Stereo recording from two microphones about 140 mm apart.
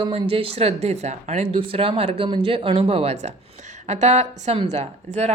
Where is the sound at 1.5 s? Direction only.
40° right (ahead or behind).